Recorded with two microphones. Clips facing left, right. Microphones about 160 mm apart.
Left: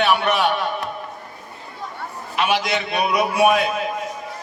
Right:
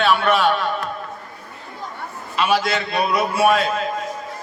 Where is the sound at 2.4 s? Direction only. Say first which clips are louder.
Right 1 dB; 20° left (ahead or behind).